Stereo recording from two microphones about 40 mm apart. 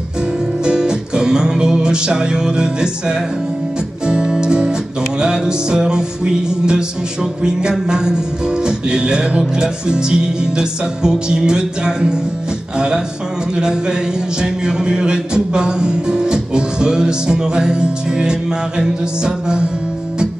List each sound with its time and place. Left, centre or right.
0.7 s music: right